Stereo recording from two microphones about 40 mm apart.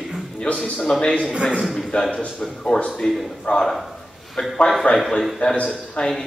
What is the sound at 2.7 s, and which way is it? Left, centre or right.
Speech, left.